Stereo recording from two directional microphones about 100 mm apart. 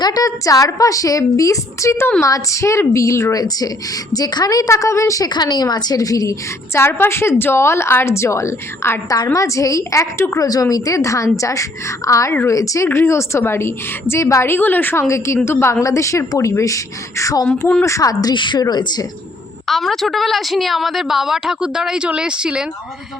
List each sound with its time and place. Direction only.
0.0 s a woman's voice: 40° left (ahead or behind)
6.7 s a woman's voice: 25° left (ahead or behind)
10.4 s a woman's voice: 35° left (ahead or behind)
19.6 s a woman's voice: centre (ahead or behind)